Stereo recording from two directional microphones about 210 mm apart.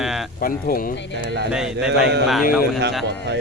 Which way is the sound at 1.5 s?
5° right (ahead or behind).